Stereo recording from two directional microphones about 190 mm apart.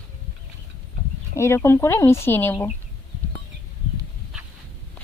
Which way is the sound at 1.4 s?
15° left (ahead or behind).